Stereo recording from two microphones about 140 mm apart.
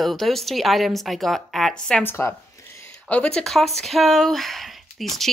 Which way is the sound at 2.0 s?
15° left (ahead or behind).